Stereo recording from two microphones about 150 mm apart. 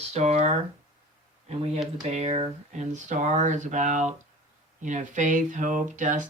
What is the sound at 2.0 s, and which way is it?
Speech, 45° right (ahead or behind).